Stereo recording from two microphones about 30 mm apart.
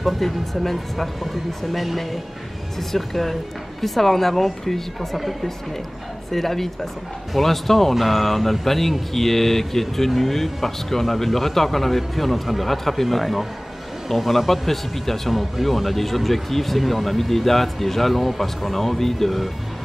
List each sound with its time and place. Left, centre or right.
0.0 s speech: centre